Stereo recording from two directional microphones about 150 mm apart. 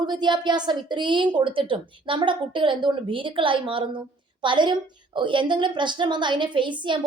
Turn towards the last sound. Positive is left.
turn(degrees=-30)  # may be behind; listen again after turning